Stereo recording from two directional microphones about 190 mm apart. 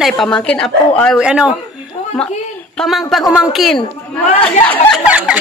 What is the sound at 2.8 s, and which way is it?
Speech, centre (ahead or behind).